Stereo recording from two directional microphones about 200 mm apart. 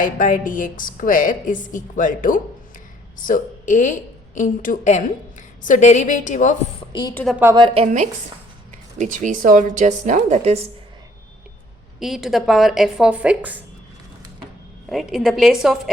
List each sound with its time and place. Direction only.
0.0 s a woman's voice: 40° left (ahead or behind)
7.1 s a woman's voice: 10° left (ahead or behind)
7.5 s a woman's voice: 25° right (ahead or behind)
11.9 s speech: centre (ahead or behind)
14.8 s speech: centre (ahead or behind)